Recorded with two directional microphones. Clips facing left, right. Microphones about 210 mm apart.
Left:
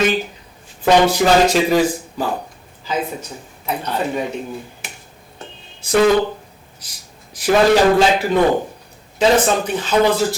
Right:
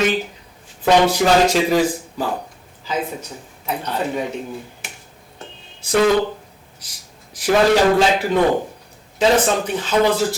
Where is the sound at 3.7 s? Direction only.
15° left (ahead or behind).